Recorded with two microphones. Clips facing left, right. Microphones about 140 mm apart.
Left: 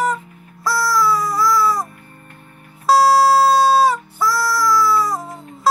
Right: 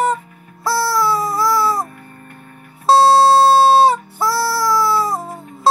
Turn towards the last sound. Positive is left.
turn(degrees=-30)  # may be behind; listen again after turning